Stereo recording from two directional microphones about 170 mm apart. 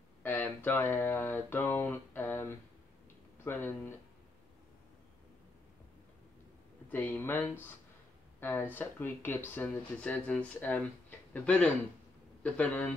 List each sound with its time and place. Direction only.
0.2 s speech: 10° left (ahead or behind)
6.9 s speech: 10° left (ahead or behind)